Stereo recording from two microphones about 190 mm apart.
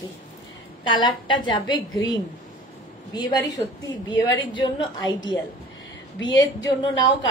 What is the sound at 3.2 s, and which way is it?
A woman's voice, 20° left (ahead or behind).